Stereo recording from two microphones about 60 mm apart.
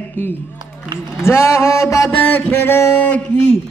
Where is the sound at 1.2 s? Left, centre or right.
Left.